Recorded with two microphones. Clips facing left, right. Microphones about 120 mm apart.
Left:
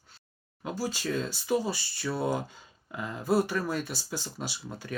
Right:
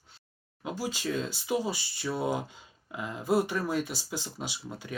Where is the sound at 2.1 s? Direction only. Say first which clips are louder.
Left 1 dB; 20° right (ahead or behind).